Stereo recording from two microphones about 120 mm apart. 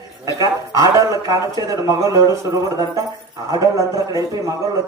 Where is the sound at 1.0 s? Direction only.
25° right (ahead or behind).